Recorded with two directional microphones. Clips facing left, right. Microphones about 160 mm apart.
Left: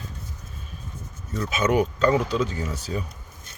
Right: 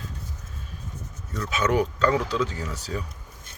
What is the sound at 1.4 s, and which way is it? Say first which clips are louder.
Speech: left 2 dB; 20° left (ahead or behind).